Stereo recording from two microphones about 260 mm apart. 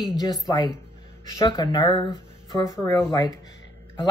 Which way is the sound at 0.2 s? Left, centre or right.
Centre.